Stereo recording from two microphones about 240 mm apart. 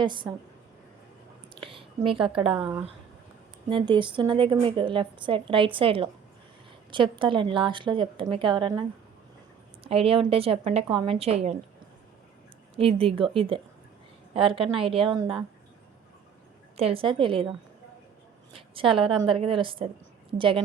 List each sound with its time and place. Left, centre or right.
0.0 s a woman's voice: centre
1.5 s a sound: right
2.5 s speech: centre
3.7 s a woman's voice: centre
9.8 s a woman's voice: right
12.7 s a woman's voice: right
16.7 s a woman's voice: right
18.5 s a sound: right
19.3 s a woman's voice: right